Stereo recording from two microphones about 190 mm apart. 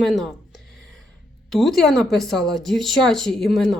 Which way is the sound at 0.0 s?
Centre (ahead or behind).